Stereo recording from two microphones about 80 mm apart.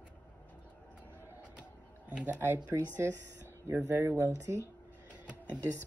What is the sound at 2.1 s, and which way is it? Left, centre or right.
Speech, centre.